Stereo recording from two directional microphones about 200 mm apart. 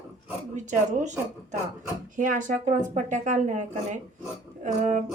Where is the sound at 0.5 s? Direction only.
35° right (ahead or behind).